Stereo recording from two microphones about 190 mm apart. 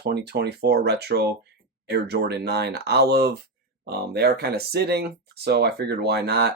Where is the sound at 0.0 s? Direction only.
60° right (ahead or behind).